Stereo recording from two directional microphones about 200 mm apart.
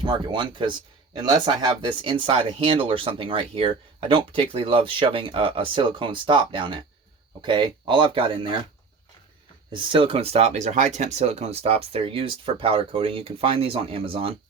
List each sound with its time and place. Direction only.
0.0 s speech: 25° right (ahead or behind)
9.7 s speech: 25° right (ahead or behind)